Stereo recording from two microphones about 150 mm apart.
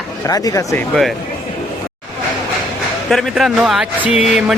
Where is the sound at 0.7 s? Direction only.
5° left (ahead or behind).